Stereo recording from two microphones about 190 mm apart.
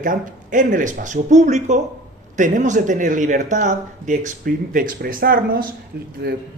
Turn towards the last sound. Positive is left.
turn(degrees=-55)  # may be behind; listen again after turning